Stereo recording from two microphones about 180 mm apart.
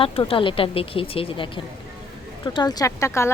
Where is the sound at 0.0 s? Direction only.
30° left (ahead or behind).